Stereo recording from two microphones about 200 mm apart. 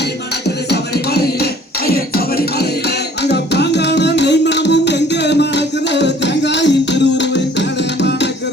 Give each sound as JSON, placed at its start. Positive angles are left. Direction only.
{"t": 0.4, "sound": "music", "side_deg": 55}